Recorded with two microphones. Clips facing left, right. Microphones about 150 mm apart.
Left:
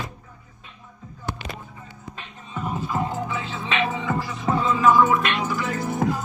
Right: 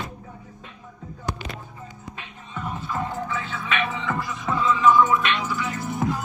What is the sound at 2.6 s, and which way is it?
Music, 10° left (ahead or behind).